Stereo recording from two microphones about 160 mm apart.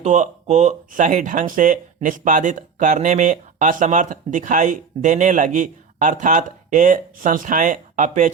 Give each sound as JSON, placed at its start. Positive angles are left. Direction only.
{"t": 0.0, "sound": "speech", "side_deg": -45}